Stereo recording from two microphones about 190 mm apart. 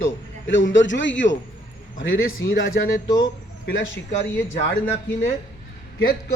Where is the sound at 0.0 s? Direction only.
80° left.